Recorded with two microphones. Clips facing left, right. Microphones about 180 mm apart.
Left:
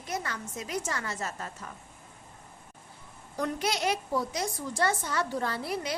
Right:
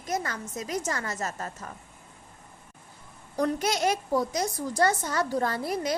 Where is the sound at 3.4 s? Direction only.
40° right (ahead or behind).